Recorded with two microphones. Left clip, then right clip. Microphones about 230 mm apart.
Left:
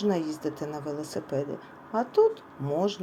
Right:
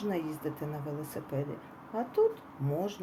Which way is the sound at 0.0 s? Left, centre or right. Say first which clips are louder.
Left 6 dB; centre.